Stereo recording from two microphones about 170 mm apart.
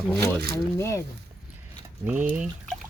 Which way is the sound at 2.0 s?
10° right (ahead or behind).